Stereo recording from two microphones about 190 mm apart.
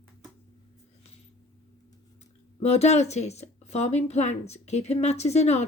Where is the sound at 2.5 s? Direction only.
35° left (ahead or behind).